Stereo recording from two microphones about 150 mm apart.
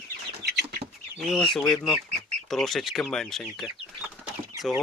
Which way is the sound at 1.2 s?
Centre (ahead or behind).